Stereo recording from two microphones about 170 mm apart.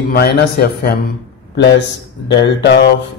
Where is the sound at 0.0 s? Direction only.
60° left (ahead or behind).